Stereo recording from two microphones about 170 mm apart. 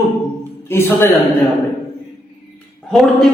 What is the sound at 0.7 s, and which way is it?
Music, 15° left (ahead or behind).